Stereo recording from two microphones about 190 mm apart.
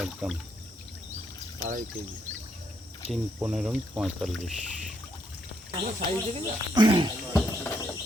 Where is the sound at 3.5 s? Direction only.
5° right (ahead or behind).